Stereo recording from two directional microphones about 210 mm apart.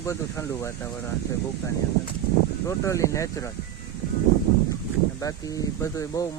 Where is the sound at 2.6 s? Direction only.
15° left (ahead or behind).